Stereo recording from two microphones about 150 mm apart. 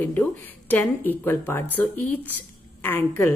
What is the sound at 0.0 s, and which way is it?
A woman's voice, 10° left (ahead or behind).